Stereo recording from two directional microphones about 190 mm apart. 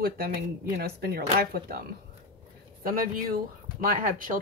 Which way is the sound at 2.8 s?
50° right (ahead or behind).